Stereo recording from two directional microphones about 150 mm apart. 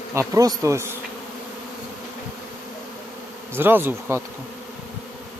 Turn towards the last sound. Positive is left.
turn(degrees=-15)  # may be behind; listen again after turning